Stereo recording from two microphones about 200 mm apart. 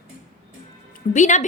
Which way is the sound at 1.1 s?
35° left (ahead or behind).